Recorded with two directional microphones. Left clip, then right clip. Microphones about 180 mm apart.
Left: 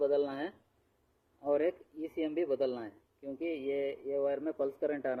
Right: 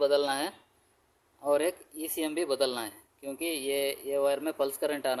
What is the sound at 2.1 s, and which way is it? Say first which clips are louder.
Speech: right 3 dB; 85° right.